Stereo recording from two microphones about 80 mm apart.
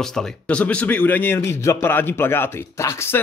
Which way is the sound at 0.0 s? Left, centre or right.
Centre.